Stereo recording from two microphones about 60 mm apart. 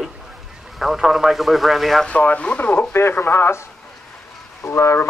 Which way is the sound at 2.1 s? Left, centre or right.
Left.